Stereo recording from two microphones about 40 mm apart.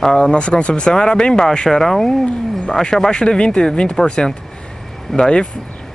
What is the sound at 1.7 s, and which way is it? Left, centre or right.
Speech, centre.